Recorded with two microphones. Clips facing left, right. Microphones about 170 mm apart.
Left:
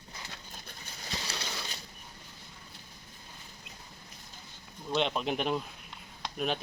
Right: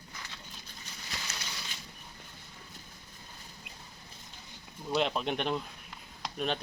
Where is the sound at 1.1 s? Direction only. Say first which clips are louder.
Left 4 dB; 30° left (ahead or behind).